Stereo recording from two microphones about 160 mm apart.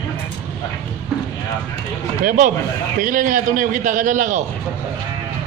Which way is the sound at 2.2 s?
60° right (ahead or behind).